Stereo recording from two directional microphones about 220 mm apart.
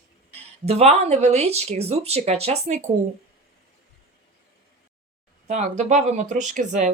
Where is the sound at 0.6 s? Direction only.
30° right (ahead or behind).